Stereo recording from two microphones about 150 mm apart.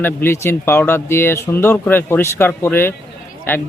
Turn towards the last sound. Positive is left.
turn(degrees=15)  # may be behind; listen again after turning